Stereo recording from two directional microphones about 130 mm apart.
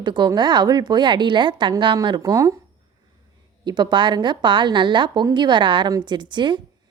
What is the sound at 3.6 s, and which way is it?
A woman's voice, 35° right (ahead or behind).